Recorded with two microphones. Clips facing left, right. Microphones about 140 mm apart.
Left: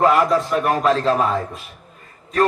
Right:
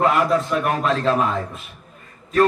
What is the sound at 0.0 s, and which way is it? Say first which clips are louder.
A man's voice: left 2 dB; 35° left (ahead or behind).